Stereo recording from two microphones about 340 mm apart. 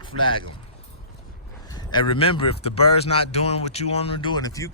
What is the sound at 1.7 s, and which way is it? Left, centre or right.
A man's voice, centre.